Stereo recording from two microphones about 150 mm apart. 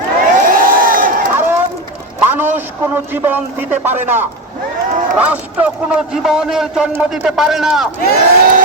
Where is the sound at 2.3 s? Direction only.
10° right (ahead or behind).